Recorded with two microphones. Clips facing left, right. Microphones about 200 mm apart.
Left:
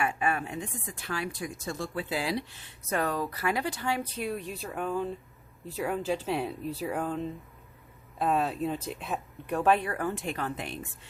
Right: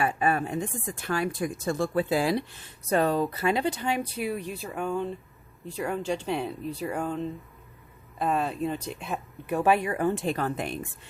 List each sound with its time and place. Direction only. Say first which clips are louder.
0.0 s speech: right 4 dB; 35° right (ahead or behind)
2.9 s speech: right 6 dB; 30° right (ahead or behind)
10.2 s speech: right 5 dB; 35° right (ahead or behind)